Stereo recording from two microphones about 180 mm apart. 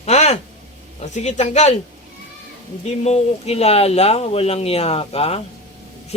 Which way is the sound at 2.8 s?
35° left (ahead or behind).